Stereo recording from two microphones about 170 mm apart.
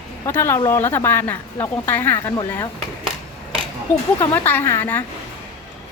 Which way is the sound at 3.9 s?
10° left (ahead or behind).